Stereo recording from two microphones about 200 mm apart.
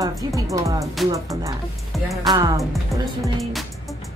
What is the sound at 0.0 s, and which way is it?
Speech, 15° right (ahead or behind).